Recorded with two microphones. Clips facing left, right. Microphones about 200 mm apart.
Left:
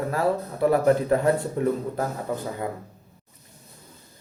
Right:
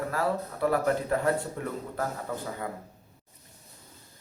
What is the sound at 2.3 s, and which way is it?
Speech, 15° left (ahead or behind).